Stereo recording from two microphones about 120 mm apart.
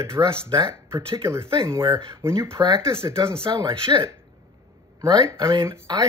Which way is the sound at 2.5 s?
35° right (ahead or behind).